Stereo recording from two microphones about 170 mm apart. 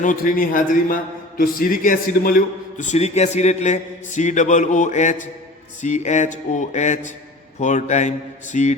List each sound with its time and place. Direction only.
0.0 s a man's voice: 50° left (ahead or behind)